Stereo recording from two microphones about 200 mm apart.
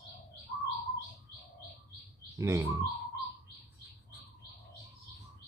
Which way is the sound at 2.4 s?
15° right (ahead or behind).